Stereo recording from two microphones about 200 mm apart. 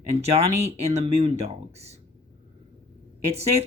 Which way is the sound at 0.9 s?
30° right (ahead or behind).